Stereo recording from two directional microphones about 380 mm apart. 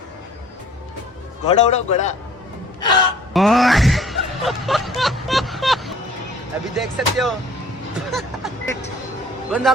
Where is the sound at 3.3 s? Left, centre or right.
Centre.